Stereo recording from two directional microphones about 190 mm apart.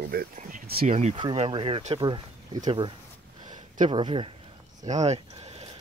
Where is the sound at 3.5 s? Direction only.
25° right (ahead or behind).